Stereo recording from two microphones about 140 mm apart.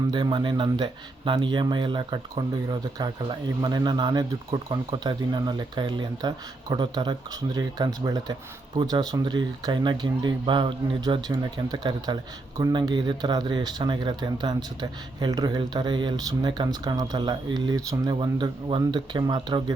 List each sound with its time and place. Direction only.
0.1 s speech: 35° right (ahead or behind)